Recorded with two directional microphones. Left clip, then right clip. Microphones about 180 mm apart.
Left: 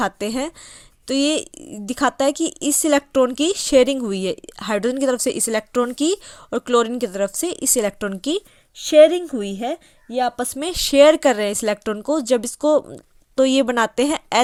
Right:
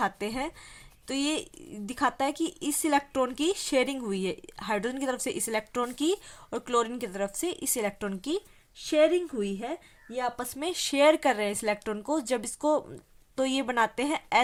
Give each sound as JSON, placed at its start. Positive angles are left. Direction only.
{"t": 0.0, "sound": "speech", "side_deg": 35}